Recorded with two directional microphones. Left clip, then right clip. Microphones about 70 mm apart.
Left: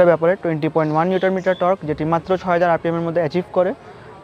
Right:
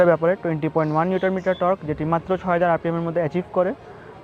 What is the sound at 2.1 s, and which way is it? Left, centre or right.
Speech, left.